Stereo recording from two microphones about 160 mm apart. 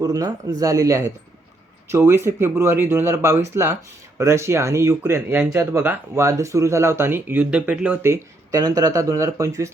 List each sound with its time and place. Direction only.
0.0 s speech: 20° right (ahead or behind)